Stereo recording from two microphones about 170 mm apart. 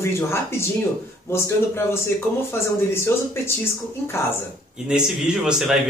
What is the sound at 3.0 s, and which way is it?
Speech, 15° left (ahead or behind).